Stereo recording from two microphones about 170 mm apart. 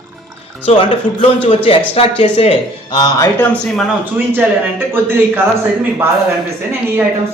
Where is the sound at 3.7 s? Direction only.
5° right (ahead or behind).